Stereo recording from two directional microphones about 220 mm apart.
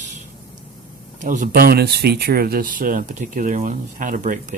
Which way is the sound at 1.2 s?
35° right (ahead or behind).